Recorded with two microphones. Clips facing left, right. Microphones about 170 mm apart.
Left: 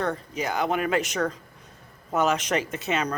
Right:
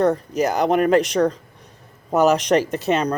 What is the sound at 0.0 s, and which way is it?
Speech, 40° right (ahead or behind).